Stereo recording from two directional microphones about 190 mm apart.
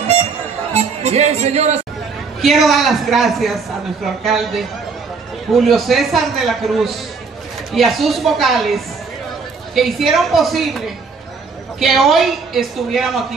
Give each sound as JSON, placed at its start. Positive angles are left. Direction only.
{"t": 0.0, "sound": "harmonica", "side_deg": -35}
{"t": 0.7, "sound": "speech", "side_deg": -35}
{"t": 2.4, "sound": "a man's voice", "side_deg": 0}
{"t": 11.8, "sound": "a man's voice", "side_deg": 0}